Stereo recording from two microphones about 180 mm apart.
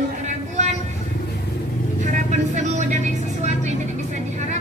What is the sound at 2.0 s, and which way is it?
Vehicle, 45° right (ahead or behind).